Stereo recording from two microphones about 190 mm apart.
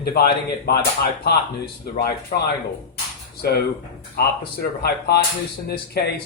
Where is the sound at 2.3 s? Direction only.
35° left (ahead or behind).